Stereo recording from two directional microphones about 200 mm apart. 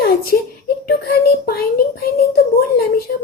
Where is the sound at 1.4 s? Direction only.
50° left (ahead or behind).